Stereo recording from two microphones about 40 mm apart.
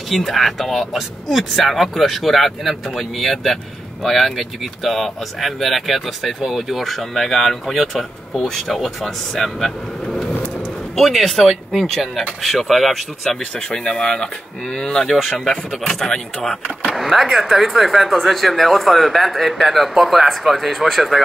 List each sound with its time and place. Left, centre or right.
0.2 s speech: centre
13.4 s speech: left
13.7 s speech: centre
15.0 s speech: centre
16.8 s speech: centre